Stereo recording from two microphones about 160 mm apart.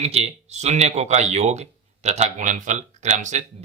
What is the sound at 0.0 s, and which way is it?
Speech, 40° right (ahead or behind).